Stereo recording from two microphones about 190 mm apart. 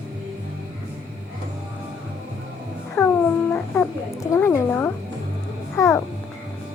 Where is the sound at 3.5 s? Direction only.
15° left (ahead or behind).